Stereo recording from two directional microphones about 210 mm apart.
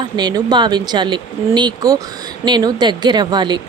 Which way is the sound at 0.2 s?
20° right (ahead or behind).